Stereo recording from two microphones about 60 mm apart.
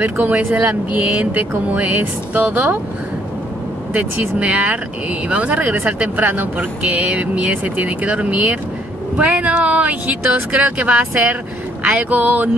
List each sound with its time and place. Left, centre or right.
0.0 s speech: right
3.9 s speech: right